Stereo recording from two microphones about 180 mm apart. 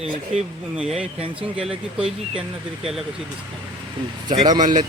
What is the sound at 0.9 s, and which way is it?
Speech, 35° right (ahead or behind).